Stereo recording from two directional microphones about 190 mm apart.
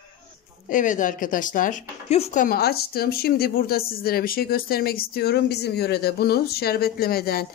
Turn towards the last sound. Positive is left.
turn(degrees=55)  # may be behind; listen again after turning